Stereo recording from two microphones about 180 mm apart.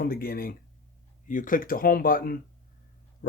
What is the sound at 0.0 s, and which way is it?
Speech, 55° left (ahead or behind).